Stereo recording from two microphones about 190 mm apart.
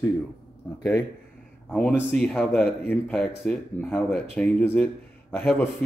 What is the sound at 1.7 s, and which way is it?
Speech, centre (ahead or behind).